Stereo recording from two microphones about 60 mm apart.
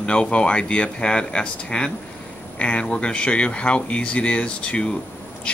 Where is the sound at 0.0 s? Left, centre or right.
Centre.